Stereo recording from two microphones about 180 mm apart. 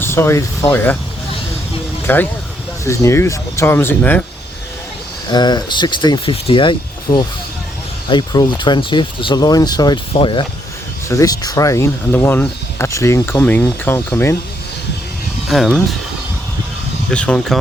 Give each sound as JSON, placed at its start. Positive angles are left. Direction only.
{"t": 0.0, "sound": "speech", "side_deg": 15}
{"t": 2.0, "sound": "speech", "side_deg": 10}
{"t": 5.3, "sound": "speech", "side_deg": 25}
{"t": 7.1, "sound": "speech", "side_deg": 50}
{"t": 8.0, "sound": "speech", "side_deg": 25}
{"t": 15.4, "sound": "speech", "side_deg": 0}
{"t": 17.1, "sound": "speech", "side_deg": 5}